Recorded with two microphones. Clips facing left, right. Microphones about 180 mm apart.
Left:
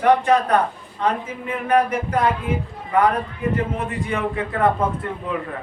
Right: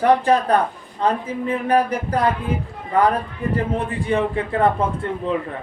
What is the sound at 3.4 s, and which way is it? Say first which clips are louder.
A man's voice: right 1 dB; 35° right (ahead or behind).